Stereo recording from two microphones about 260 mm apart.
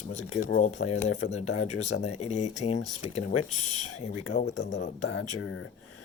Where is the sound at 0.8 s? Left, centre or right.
Left.